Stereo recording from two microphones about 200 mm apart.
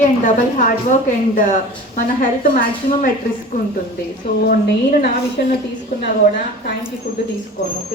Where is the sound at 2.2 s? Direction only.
40° left (ahead or behind).